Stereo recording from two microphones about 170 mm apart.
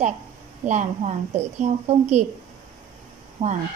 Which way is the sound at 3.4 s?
35° right (ahead or behind).